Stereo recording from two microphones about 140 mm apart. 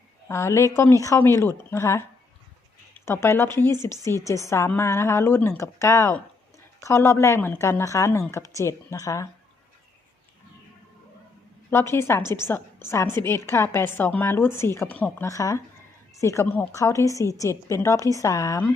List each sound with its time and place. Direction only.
0.3 s a woman's voice: 20° left (ahead or behind)
3.1 s a woman's voice: 20° left (ahead or behind)
11.7 s a woman's voice: 20° left (ahead or behind)